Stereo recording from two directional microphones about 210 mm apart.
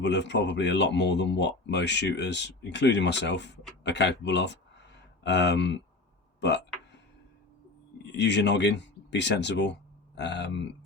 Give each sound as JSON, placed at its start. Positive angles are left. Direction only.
{"t": 0.0, "sound": "speech", "side_deg": 55}
{"t": 8.1, "sound": "speech", "side_deg": 55}